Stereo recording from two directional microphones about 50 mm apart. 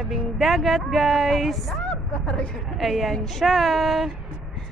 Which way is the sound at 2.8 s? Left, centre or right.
Centre.